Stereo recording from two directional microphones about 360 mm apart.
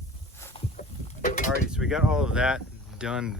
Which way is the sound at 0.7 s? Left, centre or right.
Left.